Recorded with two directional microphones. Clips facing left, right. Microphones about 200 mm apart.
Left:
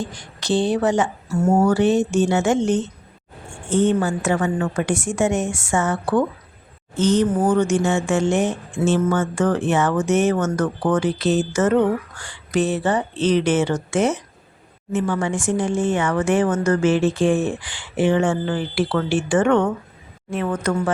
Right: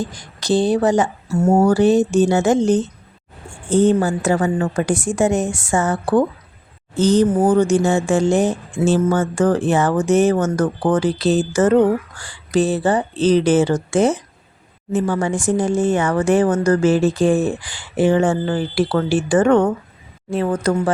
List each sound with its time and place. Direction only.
0.0 s speech: 40° right (ahead or behind)